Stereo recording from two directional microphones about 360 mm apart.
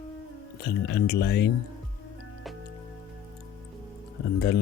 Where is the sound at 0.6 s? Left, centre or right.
Left.